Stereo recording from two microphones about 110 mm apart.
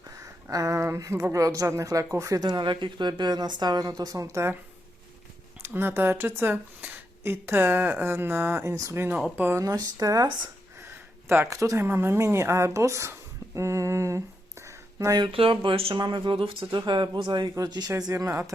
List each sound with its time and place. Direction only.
0.5 s speech: 30° right (ahead or behind)
5.6 s speech: 20° right (ahead or behind)
9.6 s speech: 35° right (ahead or behind)
11.3 s speech: 25° right (ahead or behind)
14.6 s a sound: 30° right (ahead or behind)
15.2 s speech: 55° right (ahead or behind)
16.0 s speech: 40° right (ahead or behind)
17.5 s speech: 35° right (ahead or behind)